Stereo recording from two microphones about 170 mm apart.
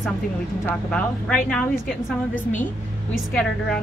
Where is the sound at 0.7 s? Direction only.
5° left (ahead or behind).